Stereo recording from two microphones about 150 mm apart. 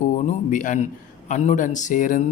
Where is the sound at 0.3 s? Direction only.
60° left (ahead or behind).